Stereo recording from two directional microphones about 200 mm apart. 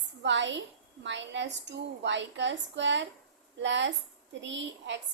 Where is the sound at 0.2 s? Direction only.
65° right (ahead or behind).